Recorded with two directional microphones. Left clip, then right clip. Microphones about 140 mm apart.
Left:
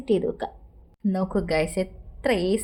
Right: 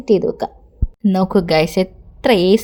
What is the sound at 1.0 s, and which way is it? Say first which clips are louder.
A woman's voice: right 10 dB; 60° right (ahead or behind).